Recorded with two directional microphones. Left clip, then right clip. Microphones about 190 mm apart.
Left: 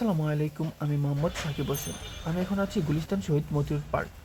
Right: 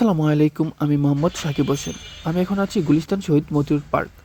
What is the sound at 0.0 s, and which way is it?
Speech, 45° right (ahead or behind).